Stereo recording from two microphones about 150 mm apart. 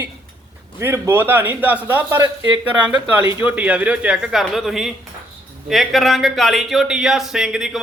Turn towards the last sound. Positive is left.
turn(degrees=-5)  # may be behind; listen again after turning